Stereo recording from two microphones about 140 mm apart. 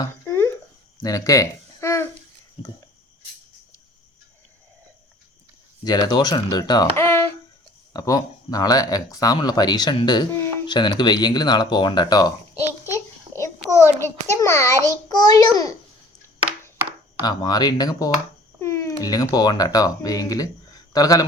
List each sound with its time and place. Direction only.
0.0 s a sound: 15° left (ahead or behind)
1.0 s speech: 25° left (ahead or behind)
2.6 s speech: 40° left (ahead or behind)
5.8 s speech: 30° left (ahead or behind)
6.9 s speech: 15° left (ahead or behind)
12.9 s a sound: 20° left (ahead or behind)
13.7 s speech: 20° left (ahead or behind)
17.2 s speech: 30° left (ahead or behind)